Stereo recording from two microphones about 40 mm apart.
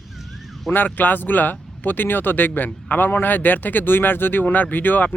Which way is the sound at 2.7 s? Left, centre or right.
Left.